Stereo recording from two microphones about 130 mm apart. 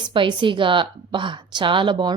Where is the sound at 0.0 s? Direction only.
40° right (ahead or behind).